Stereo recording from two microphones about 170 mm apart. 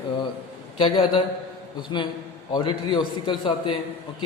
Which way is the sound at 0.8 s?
30° left (ahead or behind).